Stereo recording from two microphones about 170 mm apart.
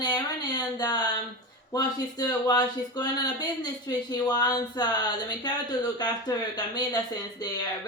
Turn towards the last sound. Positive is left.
turn(degrees=25)  # may be behind; listen again after turning